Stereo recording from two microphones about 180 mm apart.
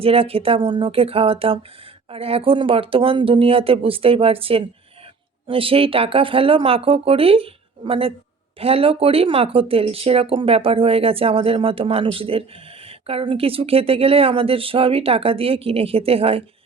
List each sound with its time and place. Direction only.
0.0 s speech: 35° right (ahead or behind)